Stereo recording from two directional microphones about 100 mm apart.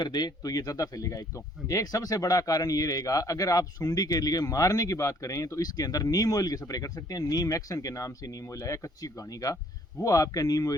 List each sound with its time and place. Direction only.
0.0 s speech: 45° left (ahead or behind)